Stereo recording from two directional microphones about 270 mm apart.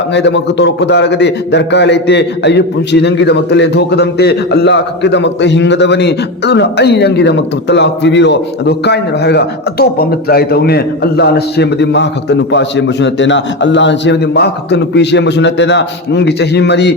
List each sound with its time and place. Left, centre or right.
0.1 s a man's voice: left